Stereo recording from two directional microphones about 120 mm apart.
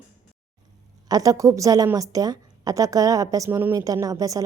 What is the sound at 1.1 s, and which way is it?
A woman's voice, 30° right (ahead or behind).